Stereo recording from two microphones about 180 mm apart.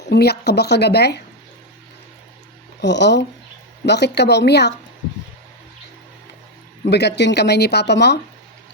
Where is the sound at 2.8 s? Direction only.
70° left (ahead or behind).